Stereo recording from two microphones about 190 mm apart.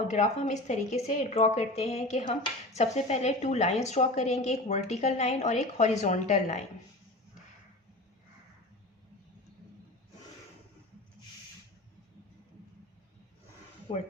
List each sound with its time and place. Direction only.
0.1 s a woman's voice: 40° left (ahead or behind)
13.9 s speech: 30° left (ahead or behind)